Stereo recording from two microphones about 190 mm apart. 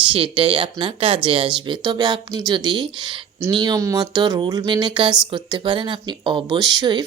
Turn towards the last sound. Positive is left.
turn(degrees=-20)  # may be behind; listen again after turning